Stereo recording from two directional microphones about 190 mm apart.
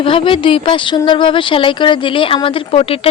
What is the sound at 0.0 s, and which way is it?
Speech, 25° left (ahead or behind).